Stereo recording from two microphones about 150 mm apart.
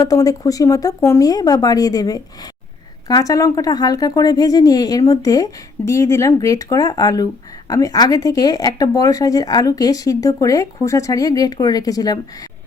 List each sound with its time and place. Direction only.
0.0 s speech: 25° left (ahead or behind)